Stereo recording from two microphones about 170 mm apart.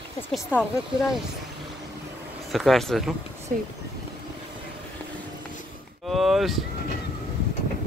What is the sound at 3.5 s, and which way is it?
Speech, 50° right (ahead or behind).